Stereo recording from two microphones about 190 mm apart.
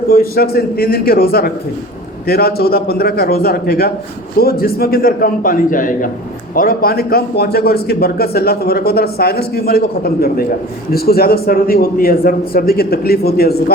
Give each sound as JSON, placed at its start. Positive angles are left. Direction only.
{"t": 0.1, "sound": "a man's voice", "side_deg": 50}